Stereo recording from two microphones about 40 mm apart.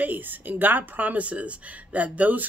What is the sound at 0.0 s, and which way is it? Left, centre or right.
Speech, right.